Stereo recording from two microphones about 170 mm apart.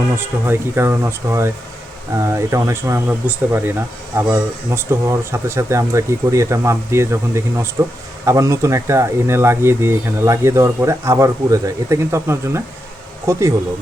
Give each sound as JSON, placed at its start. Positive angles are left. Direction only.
{"t": 0.2, "sound": "speech", "side_deg": -15}